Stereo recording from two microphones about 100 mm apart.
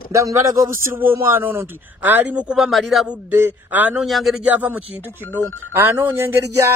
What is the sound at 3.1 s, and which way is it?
Speech, 20° right (ahead or behind).